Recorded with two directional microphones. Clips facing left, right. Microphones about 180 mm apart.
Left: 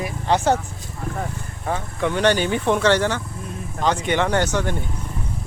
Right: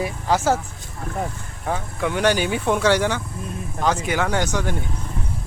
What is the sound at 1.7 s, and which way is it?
Speech, 10° right (ahead or behind).